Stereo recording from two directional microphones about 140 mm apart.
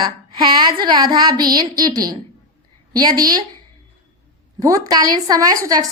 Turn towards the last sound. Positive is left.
turn(degrees=-25)  # may be behind; listen again after turning